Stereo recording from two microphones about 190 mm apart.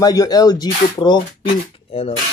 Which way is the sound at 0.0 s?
20° left (ahead or behind).